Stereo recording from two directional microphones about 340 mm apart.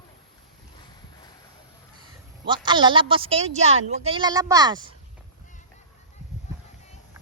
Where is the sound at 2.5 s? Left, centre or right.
Centre.